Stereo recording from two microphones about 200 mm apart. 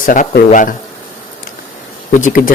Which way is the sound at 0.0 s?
45° left (ahead or behind).